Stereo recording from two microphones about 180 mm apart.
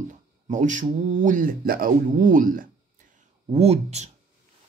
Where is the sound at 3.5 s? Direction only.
35° right (ahead or behind).